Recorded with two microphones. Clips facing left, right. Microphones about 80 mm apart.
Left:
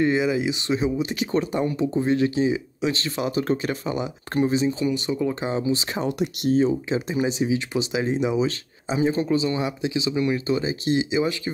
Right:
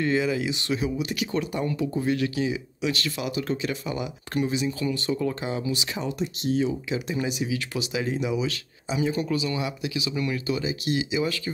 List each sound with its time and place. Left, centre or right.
0.0 s speech: left
5.5 s speech: left
6.0 s speech: left
6.6 s speech: left